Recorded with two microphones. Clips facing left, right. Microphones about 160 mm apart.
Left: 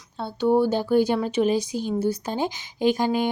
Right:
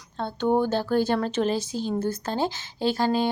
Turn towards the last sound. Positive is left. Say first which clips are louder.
# left 2 dB
turn(degrees=15)  # may be behind; listen again after turning